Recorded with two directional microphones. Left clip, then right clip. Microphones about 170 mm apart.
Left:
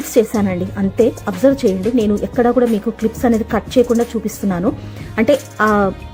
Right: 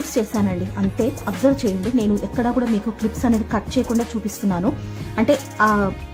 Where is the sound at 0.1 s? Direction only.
20° left (ahead or behind).